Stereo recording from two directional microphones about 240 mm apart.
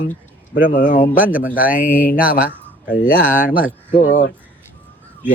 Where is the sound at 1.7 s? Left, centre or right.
Left.